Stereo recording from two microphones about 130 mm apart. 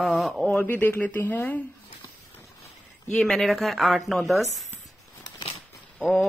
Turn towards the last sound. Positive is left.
turn(degrees=5)  # may be behind; listen again after turning